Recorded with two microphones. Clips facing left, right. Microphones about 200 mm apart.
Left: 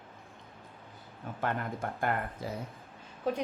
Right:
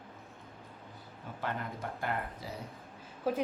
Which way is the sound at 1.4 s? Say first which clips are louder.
Left 4 dB; 50° left (ahead or behind).